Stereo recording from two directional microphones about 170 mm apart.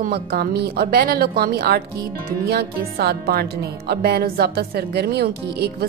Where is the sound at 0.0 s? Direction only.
65° right (ahead or behind).